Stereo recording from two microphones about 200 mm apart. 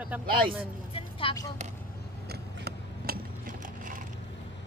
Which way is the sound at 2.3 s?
50° right (ahead or behind).